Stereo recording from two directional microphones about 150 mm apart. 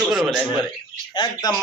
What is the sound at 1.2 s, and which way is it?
Speech, 30° left (ahead or behind).